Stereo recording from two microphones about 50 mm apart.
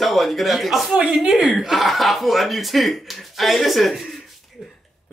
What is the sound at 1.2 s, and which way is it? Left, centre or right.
Speech, centre.